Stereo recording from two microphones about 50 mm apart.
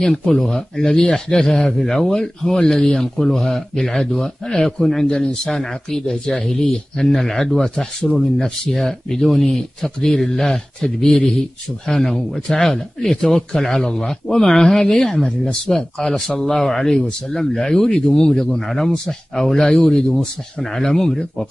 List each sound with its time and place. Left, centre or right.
0.2 s speech: centre
5.0 s speech: centre